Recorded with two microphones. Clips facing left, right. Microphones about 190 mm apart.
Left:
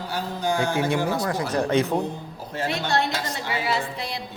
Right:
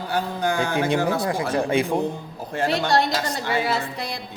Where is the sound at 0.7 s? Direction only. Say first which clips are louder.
Right 2 dB; 20° right (ahead or behind).